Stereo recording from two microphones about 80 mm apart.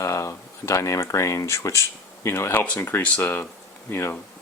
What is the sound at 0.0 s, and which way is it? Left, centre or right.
Speech, left.